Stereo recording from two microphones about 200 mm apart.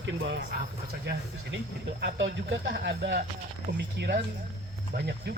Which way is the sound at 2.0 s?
60° right (ahead or behind).